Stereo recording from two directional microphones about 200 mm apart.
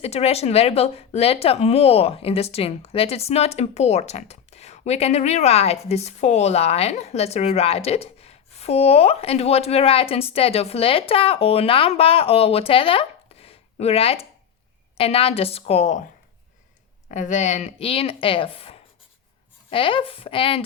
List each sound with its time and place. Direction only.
0.0 s speech: 30° left (ahead or behind)
17.1 s speech: 40° left (ahead or behind)